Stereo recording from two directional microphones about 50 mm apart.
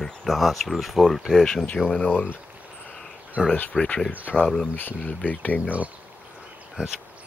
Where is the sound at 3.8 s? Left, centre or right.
Centre.